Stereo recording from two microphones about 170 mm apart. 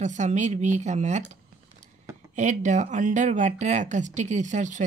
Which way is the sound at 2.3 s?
45° right (ahead or behind).